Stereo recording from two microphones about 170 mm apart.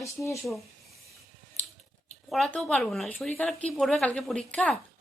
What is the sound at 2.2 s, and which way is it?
Speech, 5° left (ahead or behind).